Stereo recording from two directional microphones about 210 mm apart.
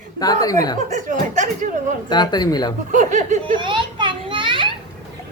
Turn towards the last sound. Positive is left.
turn(degrees=-25)  # may be behind; listen again after turning